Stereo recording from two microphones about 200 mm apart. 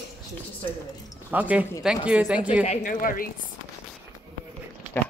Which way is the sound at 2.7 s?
45° left (ahead or behind).